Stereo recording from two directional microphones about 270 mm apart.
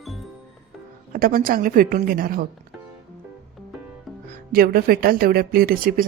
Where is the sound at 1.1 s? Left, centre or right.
Right.